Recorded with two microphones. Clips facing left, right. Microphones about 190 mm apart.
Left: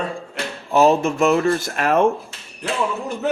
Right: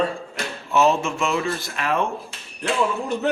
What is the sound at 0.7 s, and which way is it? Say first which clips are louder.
Speech: left 4 dB; 35° left (ahead or behind).